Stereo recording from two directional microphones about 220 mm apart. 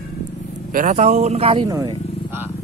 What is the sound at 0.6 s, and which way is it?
Speech, 35° right (ahead or behind).